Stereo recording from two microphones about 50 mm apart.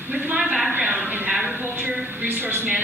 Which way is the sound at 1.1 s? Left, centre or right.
Right.